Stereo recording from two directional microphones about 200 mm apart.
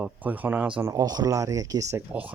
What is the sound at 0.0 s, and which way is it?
Speech, 10° right (ahead or behind).